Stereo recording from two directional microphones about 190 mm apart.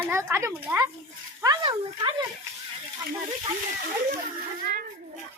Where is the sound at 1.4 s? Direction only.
20° right (ahead or behind).